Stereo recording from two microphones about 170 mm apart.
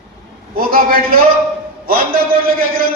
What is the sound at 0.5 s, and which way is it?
A man's voice, 60° right (ahead or behind).